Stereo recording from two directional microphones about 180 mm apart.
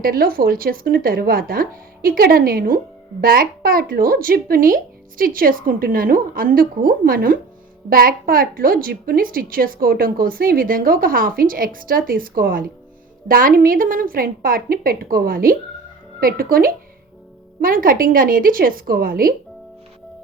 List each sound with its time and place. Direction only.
0.0 s speech: 55° right (ahead or behind)